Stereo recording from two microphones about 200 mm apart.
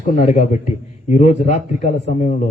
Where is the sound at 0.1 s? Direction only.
35° left (ahead or behind).